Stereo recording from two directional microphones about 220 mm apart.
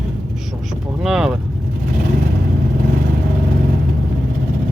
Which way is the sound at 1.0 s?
Centre (ahead or behind).